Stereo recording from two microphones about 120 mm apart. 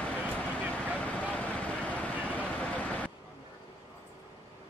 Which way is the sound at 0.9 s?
10° left (ahead or behind).